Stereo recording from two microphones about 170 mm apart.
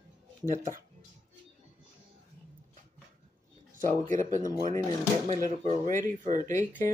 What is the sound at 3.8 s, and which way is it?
Speech, 50° right (ahead or behind).